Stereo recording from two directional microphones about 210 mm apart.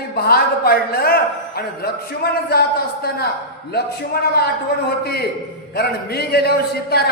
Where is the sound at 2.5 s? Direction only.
45° left (ahead or behind).